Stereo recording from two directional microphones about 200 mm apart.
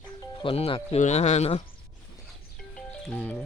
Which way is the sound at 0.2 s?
25° left (ahead or behind).